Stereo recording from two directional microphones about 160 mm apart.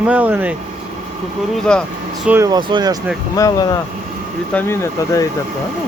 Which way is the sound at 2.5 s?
30° right (ahead or behind).